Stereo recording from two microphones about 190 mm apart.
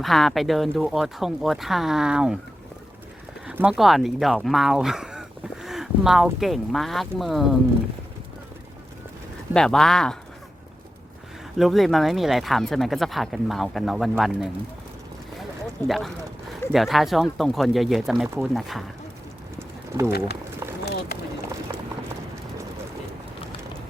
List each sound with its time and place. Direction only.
0.0 s speech: centre (ahead or behind)
3.4 s speech: 5° right (ahead or behind)
9.5 s speech: 5° left (ahead or behind)
11.5 s speech: centre (ahead or behind)
15.9 s speech: centre (ahead or behind)
19.5 s pigeon: 15° right (ahead or behind)
21.7 s clip-clop: 20° right (ahead or behind)